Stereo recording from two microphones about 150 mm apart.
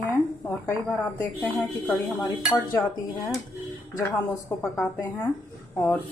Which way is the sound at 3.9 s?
10° left (ahead or behind).